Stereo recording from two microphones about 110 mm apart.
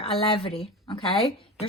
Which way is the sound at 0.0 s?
55° left (ahead or behind).